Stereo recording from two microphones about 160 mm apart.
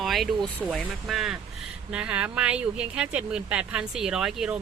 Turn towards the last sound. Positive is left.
turn(degrees=-5)  # may be behind; listen again after turning